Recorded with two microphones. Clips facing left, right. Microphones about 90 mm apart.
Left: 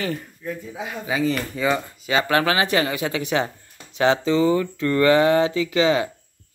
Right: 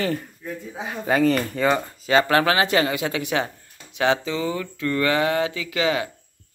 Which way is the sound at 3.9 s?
30° left (ahead or behind).